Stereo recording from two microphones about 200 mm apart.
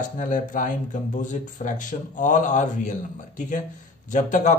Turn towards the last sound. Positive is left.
turn(degrees=40)  # may be behind; listen again after turning